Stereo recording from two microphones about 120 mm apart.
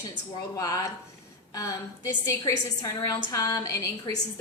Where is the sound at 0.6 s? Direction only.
30° left (ahead or behind).